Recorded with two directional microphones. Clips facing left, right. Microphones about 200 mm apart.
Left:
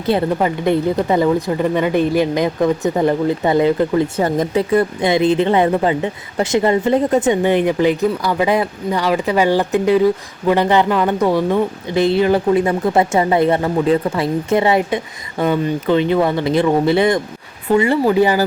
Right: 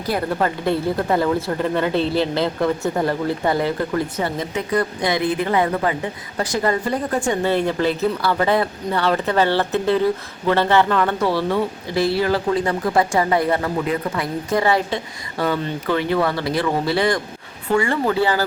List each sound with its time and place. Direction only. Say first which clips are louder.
0.0 s speech: left 5 dB; 20° left (ahead or behind)
4.2 s speech: left 7 dB; 40° left (ahead or behind)
4.7 s speech: left 3 dB; 25° left (ahead or behind)